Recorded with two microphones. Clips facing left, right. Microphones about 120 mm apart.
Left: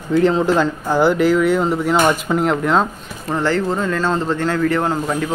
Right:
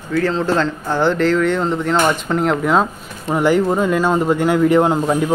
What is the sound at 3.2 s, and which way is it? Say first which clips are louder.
Speech: right 3 dB; 15° right (ahead or behind).